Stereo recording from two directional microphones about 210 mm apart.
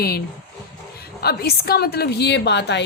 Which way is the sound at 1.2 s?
50° left (ahead or behind).